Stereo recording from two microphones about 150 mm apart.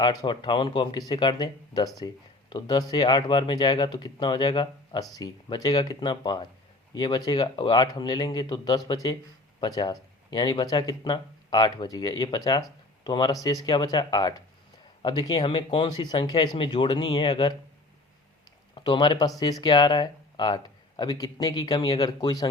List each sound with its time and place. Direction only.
0.0 s speech: 30° left (ahead or behind)
18.7 s speech: 30° left (ahead or behind)